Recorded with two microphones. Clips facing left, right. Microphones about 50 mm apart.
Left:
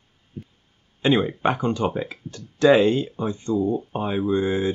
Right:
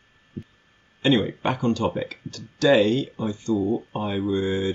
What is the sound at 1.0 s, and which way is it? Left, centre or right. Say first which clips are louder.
Speech: left 1 dB; centre.